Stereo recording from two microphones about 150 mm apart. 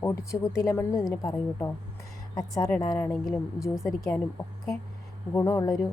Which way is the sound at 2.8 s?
20° left (ahead or behind).